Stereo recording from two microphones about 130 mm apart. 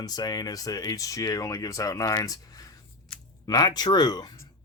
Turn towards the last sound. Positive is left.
turn(degrees=30)  # may be behind; listen again after turning